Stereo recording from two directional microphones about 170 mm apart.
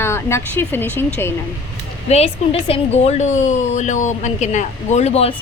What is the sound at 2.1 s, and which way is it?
A woman's voice, 35° left (ahead or behind).